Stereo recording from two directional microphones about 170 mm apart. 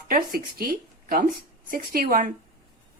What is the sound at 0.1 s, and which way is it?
Speech, 60° right (ahead or behind).